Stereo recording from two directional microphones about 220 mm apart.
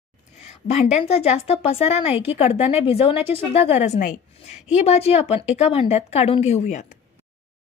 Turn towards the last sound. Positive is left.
turn(degrees=35)  # may be behind; listen again after turning